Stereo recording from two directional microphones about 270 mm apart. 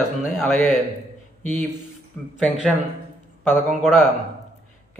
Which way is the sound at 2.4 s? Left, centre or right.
Centre.